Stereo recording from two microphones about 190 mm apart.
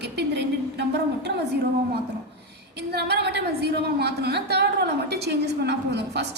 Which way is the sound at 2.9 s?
60° right (ahead or behind).